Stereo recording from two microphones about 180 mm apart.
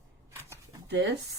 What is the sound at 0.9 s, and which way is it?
Speech, 70° right (ahead or behind).